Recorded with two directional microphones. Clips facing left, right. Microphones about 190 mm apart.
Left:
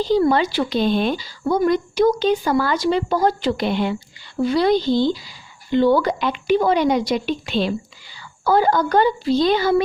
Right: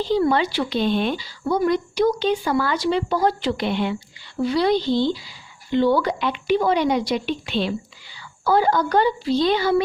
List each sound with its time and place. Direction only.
0.0 s speech: 40° left (ahead or behind)